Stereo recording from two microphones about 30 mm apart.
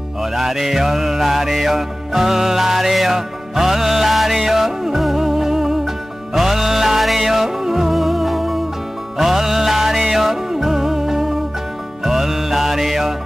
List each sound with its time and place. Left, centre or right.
0.2 s music: centre
7.9 s music: centre